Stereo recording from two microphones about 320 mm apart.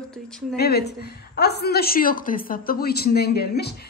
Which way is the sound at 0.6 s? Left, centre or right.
Left.